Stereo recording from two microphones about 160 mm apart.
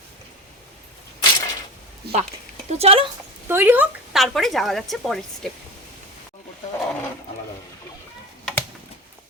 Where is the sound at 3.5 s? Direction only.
10° right (ahead or behind).